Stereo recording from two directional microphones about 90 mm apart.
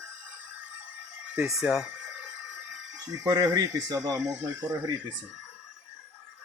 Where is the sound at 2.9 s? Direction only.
45° right (ahead or behind); by 5.0 s 25° right (ahead or behind).